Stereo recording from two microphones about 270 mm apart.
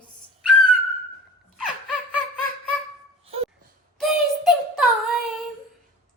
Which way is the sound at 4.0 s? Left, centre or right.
Centre.